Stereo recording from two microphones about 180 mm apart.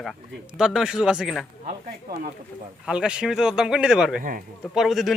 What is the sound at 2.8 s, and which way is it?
A man's voice, 5° right (ahead or behind).